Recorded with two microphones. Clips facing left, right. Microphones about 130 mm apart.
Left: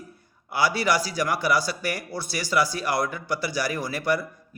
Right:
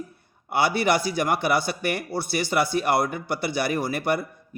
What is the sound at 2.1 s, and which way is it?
Speech, 55° right (ahead or behind).